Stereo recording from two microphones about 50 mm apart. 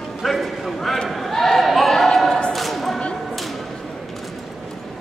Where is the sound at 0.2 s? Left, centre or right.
Centre.